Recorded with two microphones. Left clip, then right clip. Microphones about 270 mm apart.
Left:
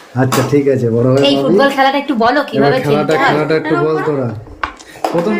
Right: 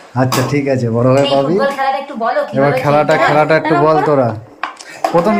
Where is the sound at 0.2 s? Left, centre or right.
Centre.